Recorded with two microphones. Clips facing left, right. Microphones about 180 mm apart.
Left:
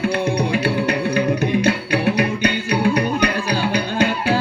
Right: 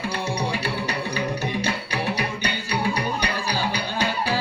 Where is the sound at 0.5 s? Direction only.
55° left (ahead or behind).